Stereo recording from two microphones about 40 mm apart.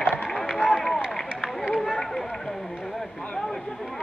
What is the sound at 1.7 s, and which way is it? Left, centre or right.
Run, centre.